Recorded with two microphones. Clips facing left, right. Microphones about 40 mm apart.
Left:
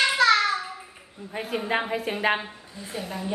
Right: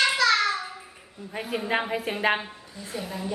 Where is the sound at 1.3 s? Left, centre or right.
Centre.